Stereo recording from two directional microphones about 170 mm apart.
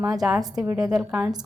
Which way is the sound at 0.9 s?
5° right (ahead or behind).